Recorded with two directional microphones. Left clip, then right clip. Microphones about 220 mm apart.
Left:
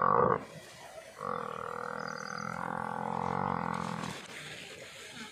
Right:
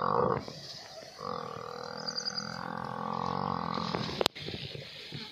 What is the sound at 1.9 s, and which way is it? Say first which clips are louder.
Frog: right 2 dB; 15° left (ahead or behind).